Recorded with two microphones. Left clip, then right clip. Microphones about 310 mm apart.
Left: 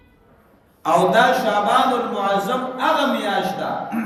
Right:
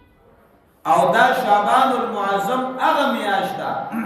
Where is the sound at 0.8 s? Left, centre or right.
Centre.